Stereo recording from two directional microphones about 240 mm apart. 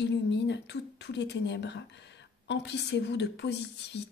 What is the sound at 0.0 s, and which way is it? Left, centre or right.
Speech, left.